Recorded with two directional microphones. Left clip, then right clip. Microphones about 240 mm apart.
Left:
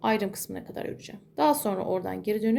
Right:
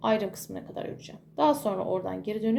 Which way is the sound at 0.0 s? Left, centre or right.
Left.